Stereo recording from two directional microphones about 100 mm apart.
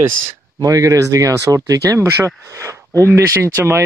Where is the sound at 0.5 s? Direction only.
35° right (ahead or behind).